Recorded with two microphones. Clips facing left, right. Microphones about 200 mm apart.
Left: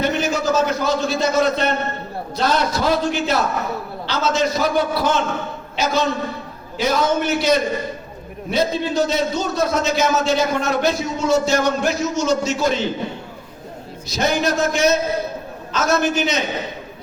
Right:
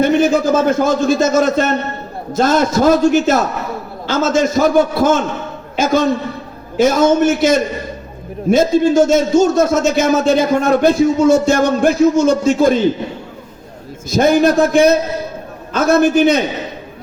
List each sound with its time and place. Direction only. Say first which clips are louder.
0.0 s a man's voice: right 8 dB; 50° right (ahead or behind)
14.1 s a man's voice: right 8 dB; 50° right (ahead or behind)